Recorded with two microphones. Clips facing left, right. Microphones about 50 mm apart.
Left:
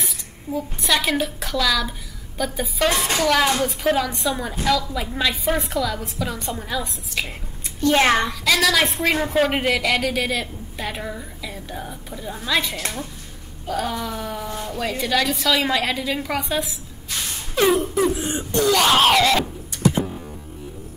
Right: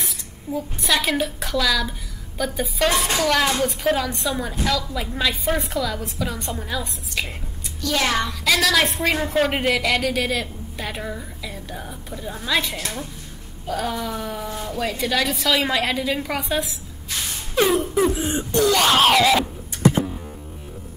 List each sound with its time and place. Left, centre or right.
0.0 s a woman's voice: centre
7.8 s a child's voice: left
8.3 s a woman's voice: centre
17.2 s wail: centre